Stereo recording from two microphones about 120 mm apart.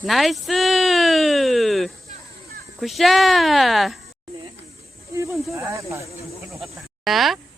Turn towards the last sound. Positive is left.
turn(degrees=0)  # may be behind; listen again after turning